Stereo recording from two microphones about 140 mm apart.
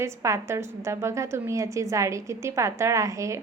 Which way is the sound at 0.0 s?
20° right (ahead or behind).